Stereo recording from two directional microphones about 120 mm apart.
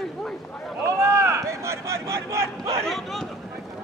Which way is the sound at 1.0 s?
20° right (ahead or behind).